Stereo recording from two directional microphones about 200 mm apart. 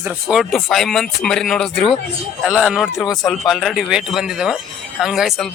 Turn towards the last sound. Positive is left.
turn(degrees=0)  # may be behind; listen again after turning